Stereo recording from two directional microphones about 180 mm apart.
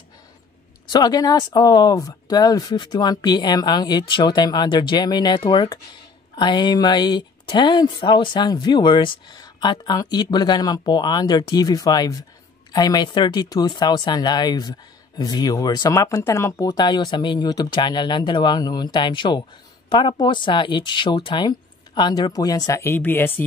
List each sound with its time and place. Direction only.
0.8 s speech: 20° left (ahead or behind)